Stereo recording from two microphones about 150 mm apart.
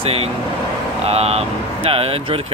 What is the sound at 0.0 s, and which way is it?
Speech, 40° right (ahead or behind).